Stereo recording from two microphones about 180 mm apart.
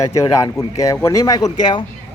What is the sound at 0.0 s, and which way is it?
Speech, 15° left (ahead or behind).